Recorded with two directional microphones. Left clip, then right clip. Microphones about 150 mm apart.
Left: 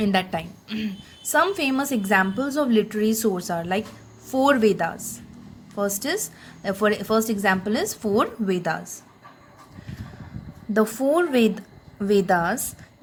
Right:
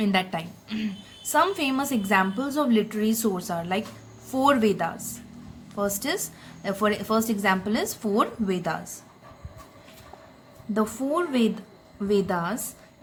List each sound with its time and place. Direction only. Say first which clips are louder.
0.0 s a woman's voice: left 2 dB; 30° left (ahead or behind)
10.8 s a woman's voice: left 6 dB; 35° left (ahead or behind)